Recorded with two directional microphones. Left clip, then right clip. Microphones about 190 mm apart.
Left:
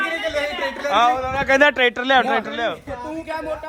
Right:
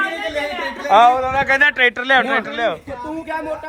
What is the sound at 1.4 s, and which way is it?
Speech, 30° left (ahead or behind).